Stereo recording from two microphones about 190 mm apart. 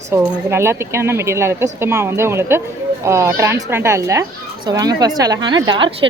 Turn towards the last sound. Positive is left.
turn(degrees=-25)  # may be behind; listen again after turning